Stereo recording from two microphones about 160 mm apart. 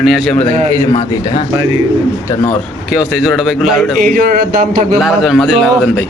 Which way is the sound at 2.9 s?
5° right (ahead or behind).